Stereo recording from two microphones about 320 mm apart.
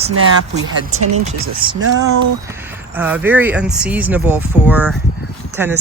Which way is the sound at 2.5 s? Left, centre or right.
Centre.